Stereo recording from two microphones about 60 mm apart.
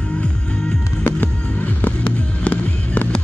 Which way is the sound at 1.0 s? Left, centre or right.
Left.